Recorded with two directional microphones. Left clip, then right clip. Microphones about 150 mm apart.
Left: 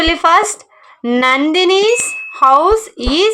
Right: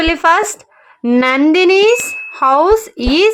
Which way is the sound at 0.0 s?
15° right (ahead or behind).